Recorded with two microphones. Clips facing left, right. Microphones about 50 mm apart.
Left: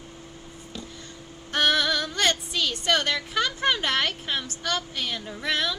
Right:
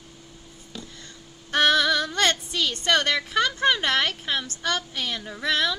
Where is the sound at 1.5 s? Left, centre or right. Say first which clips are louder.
Right 3 dB; right.